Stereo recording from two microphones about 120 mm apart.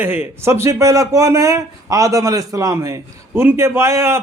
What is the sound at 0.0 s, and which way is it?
A man's voice, 15° right (ahead or behind).